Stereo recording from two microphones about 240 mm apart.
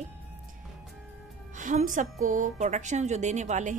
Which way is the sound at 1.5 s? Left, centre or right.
Right.